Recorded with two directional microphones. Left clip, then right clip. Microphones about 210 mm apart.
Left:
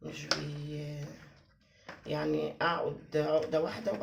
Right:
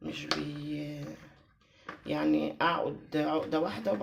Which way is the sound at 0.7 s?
35° right (ahead or behind).